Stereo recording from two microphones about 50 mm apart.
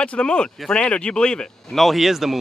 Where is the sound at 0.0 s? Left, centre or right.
Left.